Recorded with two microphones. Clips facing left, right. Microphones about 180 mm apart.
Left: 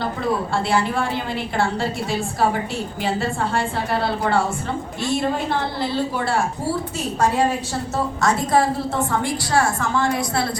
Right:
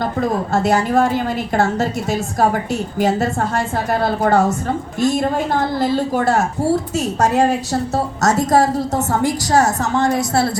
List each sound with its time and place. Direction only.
0.0 s a woman's voice: 45° right (ahead or behind)